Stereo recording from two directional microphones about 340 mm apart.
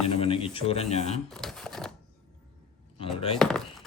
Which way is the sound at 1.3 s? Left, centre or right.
Centre.